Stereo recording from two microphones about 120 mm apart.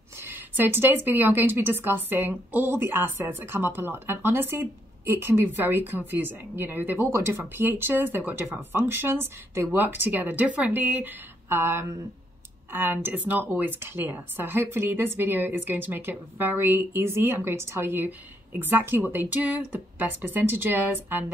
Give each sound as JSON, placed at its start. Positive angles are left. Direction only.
{"t": 0.2, "sound": "speech", "side_deg": -15}